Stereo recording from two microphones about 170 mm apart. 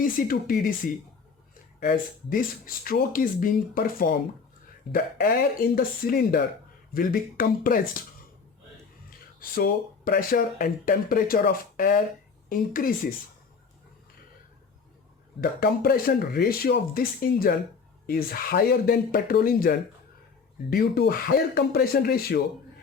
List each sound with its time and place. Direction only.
0.0 s speech: 55° left (ahead or behind)
1.8 s speech: 55° left (ahead or behind)
9.0 s speech: 55° left (ahead or behind)
15.4 s speech: 60° left (ahead or behind)